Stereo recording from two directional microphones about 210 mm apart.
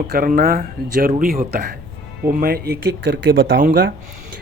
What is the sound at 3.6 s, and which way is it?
Speech, 45° right (ahead or behind).